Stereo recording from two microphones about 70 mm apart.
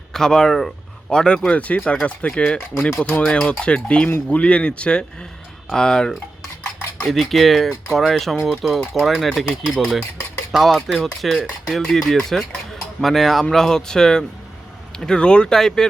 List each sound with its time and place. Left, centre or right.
0.1 s speech: centre